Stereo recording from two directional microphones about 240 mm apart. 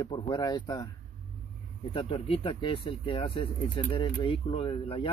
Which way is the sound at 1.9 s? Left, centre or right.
Left.